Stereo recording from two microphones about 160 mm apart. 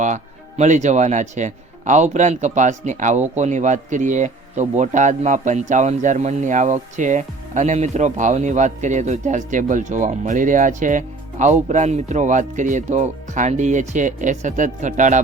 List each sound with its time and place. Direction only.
0.0 s speech: 50° right (ahead or behind)